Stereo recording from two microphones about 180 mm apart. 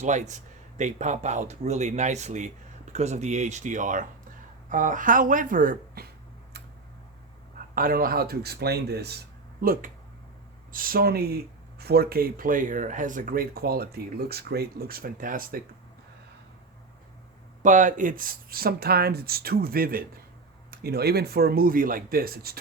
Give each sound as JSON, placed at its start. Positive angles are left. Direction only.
{"t": 0.0, "sound": "speech", "side_deg": -40}
{"t": 7.8, "sound": "speech", "side_deg": -55}
{"t": 17.6, "sound": "speech", "side_deg": -45}